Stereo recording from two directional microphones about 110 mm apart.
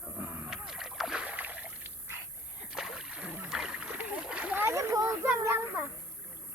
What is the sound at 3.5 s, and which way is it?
Splash, 5° right (ahead or behind).